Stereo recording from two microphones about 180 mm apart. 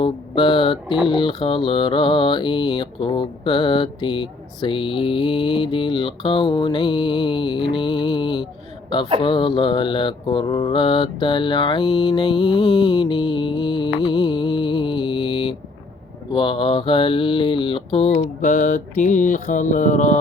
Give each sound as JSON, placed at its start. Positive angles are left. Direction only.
{"t": 0.0, "sound": "mantra", "side_deg": 30}
{"t": 12.8, "sound": "music", "side_deg": 30}
{"t": 16.3, "sound": "mantra", "side_deg": 25}